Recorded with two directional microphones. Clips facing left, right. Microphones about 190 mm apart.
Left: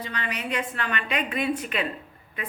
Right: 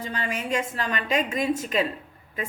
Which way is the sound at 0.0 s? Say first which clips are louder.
Right 2 dB; 45° right (ahead or behind).